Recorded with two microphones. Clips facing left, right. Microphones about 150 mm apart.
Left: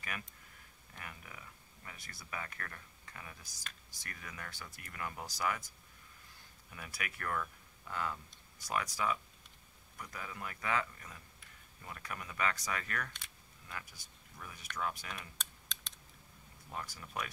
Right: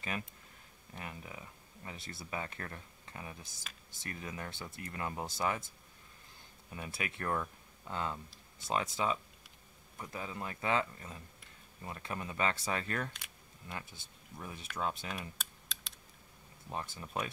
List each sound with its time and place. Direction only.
0.9 s speech: 25° right (ahead or behind)
6.7 s speech: 25° right (ahead or behind)
15.3 s typing: 5° right (ahead or behind)
16.6 s speech: 25° right (ahead or behind)